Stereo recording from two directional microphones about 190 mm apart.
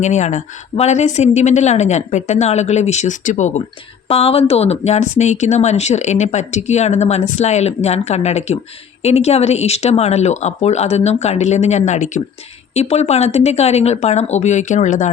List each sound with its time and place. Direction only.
0.0 s a woman's voice: 40° left (ahead or behind)